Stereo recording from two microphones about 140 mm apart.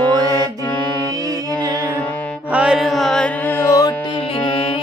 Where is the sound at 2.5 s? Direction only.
5° right (ahead or behind).